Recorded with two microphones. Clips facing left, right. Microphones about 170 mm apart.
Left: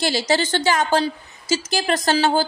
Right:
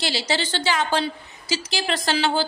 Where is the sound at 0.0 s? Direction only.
45° left (ahead or behind).